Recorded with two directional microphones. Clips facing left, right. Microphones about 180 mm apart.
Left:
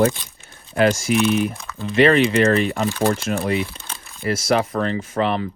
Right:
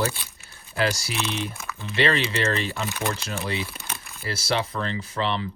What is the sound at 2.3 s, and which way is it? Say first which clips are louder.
Speech: left 9 dB; 35° left (ahead or behind).